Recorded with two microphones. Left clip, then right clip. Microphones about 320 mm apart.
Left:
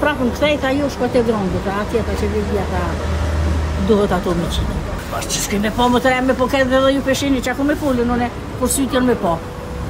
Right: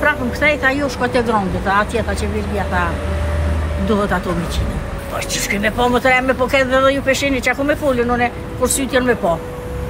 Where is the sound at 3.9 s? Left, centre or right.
Centre.